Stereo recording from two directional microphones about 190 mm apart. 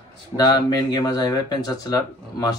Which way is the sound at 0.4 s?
20° left (ahead or behind).